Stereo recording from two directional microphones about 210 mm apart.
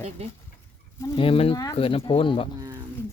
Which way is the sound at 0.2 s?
30° right (ahead or behind).